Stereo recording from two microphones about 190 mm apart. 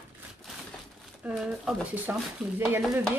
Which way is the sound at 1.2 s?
5° right (ahead or behind).